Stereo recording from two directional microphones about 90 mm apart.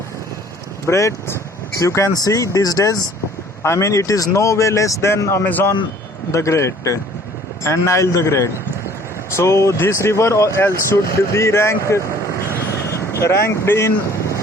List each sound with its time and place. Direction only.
0.9 s speech: 30° left (ahead or behind)
3.6 s speech: 30° left (ahead or behind)
6.3 s speech: 35° left (ahead or behind)
13.1 s speech: 30° left (ahead or behind)